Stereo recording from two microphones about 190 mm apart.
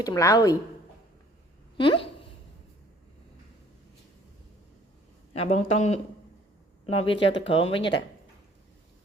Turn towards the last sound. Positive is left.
turn(degrees=25)  # may be behind; listen again after turning